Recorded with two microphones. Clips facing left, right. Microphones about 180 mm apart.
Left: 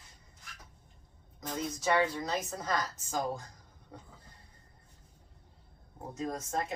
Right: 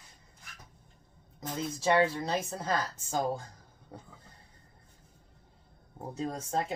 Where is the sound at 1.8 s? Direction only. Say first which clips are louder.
Right 3 dB; 30° right (ahead or behind).